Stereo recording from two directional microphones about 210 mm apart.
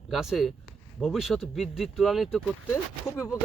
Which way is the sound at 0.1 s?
Centre (ahead or behind).